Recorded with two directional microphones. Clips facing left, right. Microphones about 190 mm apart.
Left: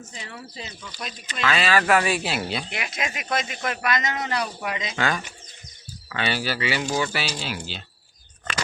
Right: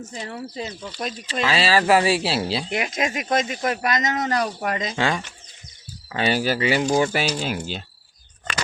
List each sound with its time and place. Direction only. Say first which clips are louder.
0.1 s speech: right 7 dB; 40° right (ahead or behind)
2.6 s speech: right 6 dB; 45° right (ahead or behind)
4.9 s speech: right 1 dB; 25° right (ahead or behind)
6.1 s speech: right 5 dB; 40° right (ahead or behind)